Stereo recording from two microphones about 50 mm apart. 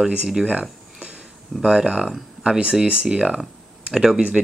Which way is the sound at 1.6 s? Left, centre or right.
Centre.